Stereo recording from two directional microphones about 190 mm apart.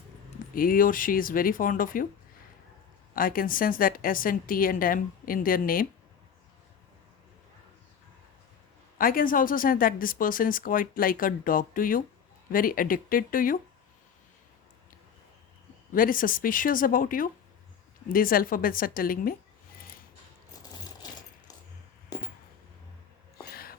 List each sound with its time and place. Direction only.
0.5 s speech: 50° left (ahead or behind)
3.2 s speech: 50° left (ahead or behind)
9.0 s speech: 50° left (ahead or behind)
15.9 s speech: 50° left (ahead or behind)
23.4 s a sound: 55° left (ahead or behind)